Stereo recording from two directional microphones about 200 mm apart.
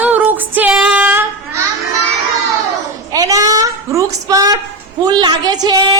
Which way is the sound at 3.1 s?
20° right (ahead or behind).